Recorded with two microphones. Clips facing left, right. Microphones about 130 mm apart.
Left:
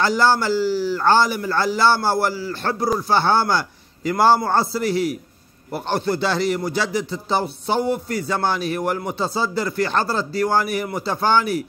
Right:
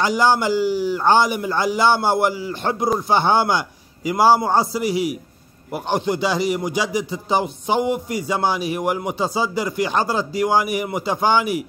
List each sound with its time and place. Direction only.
0.0 s a man's voice: 15° right (ahead or behind)